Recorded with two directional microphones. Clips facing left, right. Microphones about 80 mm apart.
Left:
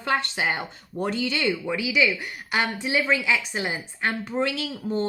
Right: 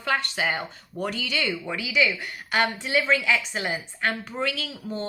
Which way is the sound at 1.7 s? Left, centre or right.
Centre.